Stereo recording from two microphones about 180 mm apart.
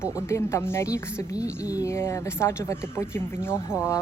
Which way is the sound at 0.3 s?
15° left (ahead or behind).